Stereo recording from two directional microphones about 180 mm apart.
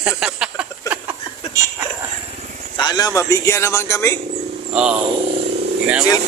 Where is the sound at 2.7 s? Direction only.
20° left (ahead or behind).